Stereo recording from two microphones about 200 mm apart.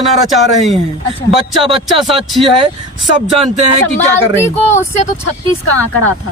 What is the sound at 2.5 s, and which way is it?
Speech, 25° right (ahead or behind).